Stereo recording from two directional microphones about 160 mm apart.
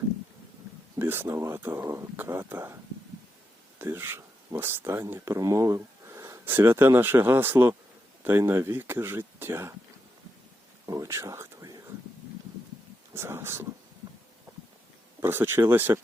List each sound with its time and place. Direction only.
0.9 s speech: 15° right (ahead or behind)
3.8 s speech: 15° right (ahead or behind)
10.8 s a sound: 20° right (ahead or behind)
13.1 s speech: 15° right (ahead or behind)
15.2 s speech: 15° right (ahead or behind)